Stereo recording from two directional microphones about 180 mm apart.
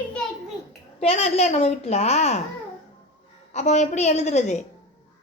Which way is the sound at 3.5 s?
40° left (ahead or behind).